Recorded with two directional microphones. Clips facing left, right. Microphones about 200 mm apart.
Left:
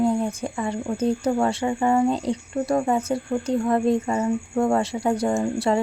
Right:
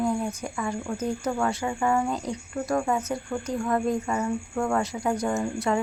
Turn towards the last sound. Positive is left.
turn(degrees=30)  # may be behind; listen again after turning